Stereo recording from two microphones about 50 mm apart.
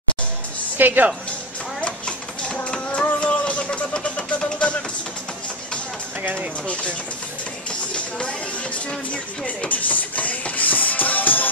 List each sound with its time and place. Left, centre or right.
0.7 s a woman's voice: right
1.8 s a sound: left
2.7 s music: centre
3.9 s vehicle: centre
6.2 s a woman's voice: right
7.9 s music: left